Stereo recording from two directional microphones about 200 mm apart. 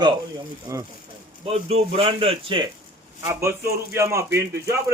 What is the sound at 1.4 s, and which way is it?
A man's voice, 30° right (ahead or behind).